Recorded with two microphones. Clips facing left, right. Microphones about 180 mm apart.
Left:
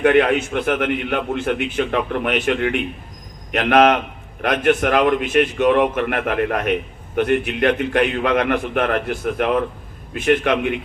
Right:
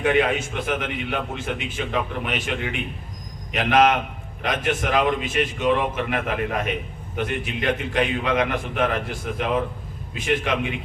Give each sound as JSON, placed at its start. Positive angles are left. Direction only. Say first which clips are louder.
{"t": 0.0, "sound": "a man's voice", "louder": "left 5 dB", "side_deg": 60}